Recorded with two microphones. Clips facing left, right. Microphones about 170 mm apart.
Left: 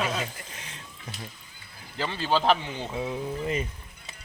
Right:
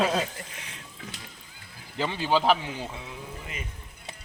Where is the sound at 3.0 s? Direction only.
35° left (ahead or behind).